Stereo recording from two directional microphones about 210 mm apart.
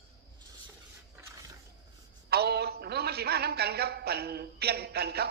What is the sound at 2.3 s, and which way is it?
A man's voice, 50° right (ahead or behind).